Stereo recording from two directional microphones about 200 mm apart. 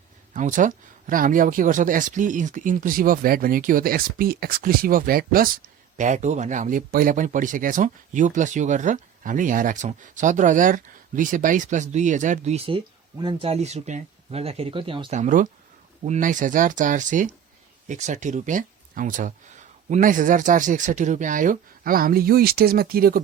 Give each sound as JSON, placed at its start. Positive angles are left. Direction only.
{"t": 0.3, "sound": "speech", "side_deg": -40}
{"t": 15.1, "sound": "speech", "side_deg": -40}